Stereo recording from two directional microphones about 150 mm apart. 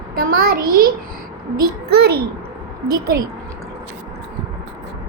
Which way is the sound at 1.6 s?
90° right.